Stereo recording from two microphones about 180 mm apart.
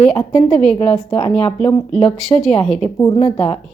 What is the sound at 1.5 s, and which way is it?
Speech, 5° left (ahead or behind).